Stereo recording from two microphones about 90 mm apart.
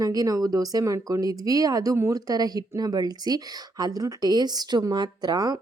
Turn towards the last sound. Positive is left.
turn(degrees=-50)  # may be behind; listen again after turning